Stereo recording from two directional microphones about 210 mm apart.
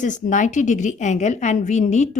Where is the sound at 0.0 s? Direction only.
35° left (ahead or behind).